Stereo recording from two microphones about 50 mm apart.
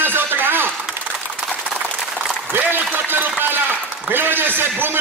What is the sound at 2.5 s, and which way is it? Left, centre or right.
A man's voice, right.